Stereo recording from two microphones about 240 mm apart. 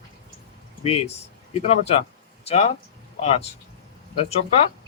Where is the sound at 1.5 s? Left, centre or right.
Left.